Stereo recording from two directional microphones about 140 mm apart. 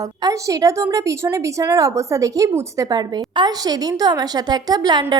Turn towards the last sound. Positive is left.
turn(degrees=-30)  # may be behind; listen again after turning